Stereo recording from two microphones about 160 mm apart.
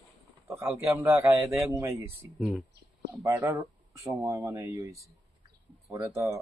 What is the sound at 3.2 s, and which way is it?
Speech, 20° right (ahead or behind).